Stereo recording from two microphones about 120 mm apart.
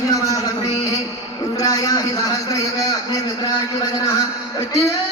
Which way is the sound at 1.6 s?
30° left (ahead or behind).